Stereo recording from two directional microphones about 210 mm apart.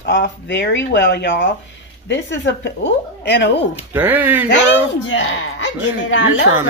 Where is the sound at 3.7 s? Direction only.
10° right (ahead or behind).